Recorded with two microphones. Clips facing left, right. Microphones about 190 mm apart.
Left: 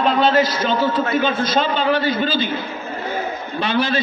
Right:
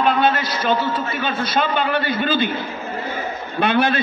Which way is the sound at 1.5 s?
60° right (ahead or behind).